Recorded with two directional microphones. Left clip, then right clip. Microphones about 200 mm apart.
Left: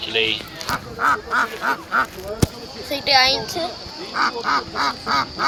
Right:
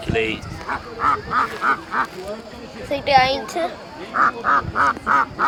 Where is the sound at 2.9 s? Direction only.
5° right (ahead or behind).